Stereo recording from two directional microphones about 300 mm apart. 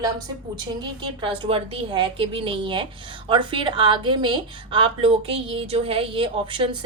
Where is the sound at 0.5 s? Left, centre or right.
Centre.